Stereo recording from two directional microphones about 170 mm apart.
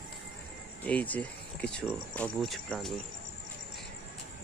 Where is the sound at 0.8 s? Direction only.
10° left (ahead or behind).